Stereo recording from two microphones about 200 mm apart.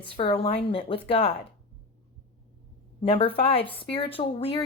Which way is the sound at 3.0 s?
25° left (ahead or behind).